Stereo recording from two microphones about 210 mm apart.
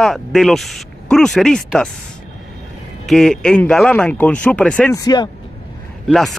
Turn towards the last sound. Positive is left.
turn(degrees=0)  # may be behind; listen again after turning